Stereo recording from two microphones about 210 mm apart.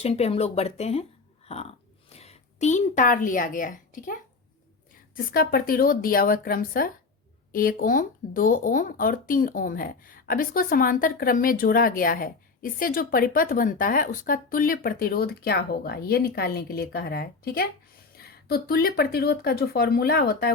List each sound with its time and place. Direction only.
0.0 s speech: 30° left (ahead or behind)
2.1 s a woman's voice: 30° left (ahead or behind); by 20.5 s 45° left (ahead or behind)